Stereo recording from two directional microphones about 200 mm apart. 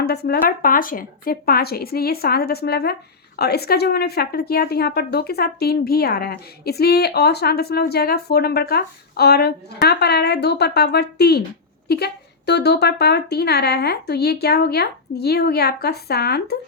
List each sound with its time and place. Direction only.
0.0 s a woman's voice: 55° left (ahead or behind)